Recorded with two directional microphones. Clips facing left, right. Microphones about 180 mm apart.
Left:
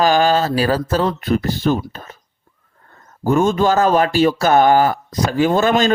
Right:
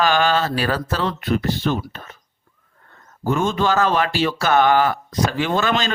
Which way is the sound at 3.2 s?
45° left (ahead or behind).